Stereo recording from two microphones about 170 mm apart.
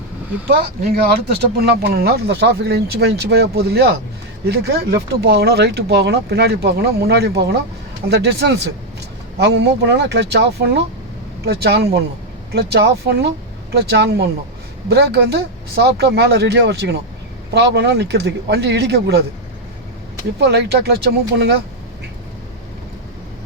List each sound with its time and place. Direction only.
0.4 s speech: 65° right (ahead or behind); by 8.6 s 85° right
9.4 s speech: 75° right (ahead or behind)
20.4 s speech: 75° right (ahead or behind)